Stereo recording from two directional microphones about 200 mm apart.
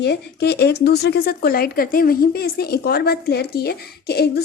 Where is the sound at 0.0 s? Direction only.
55° left (ahead or behind).